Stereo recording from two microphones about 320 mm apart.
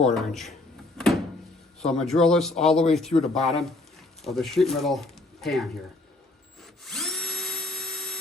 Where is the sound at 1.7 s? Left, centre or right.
Centre.